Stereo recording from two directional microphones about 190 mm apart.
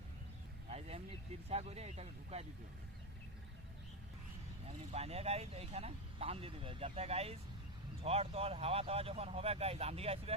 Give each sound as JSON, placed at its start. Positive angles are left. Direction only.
{"t": 0.7, "sound": "vehicle", "side_deg": -35}
{"t": 1.5, "sound": "speech", "side_deg": -35}
{"t": 4.9, "sound": "speech", "side_deg": -30}